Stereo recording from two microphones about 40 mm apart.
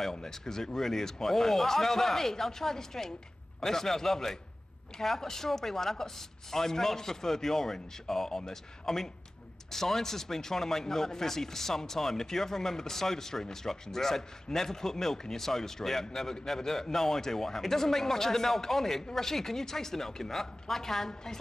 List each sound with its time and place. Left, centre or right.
0.0 s speech: centre